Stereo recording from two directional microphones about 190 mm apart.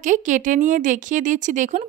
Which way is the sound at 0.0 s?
40° right (ahead or behind).